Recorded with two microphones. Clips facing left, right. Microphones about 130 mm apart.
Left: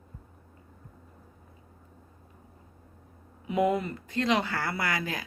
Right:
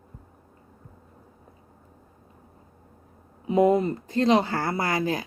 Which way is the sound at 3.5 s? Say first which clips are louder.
Right 6 dB; 30° right (ahead or behind).